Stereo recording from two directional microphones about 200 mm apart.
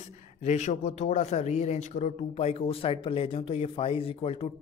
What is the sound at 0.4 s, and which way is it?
Speech, 35° left (ahead or behind).